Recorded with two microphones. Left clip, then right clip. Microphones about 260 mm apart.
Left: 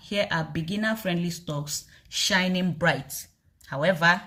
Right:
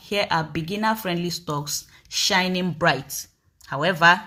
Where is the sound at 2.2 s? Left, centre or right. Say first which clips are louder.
Right 3 dB; centre.